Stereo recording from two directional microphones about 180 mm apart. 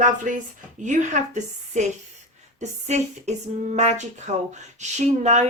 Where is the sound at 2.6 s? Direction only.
40° right (ahead or behind).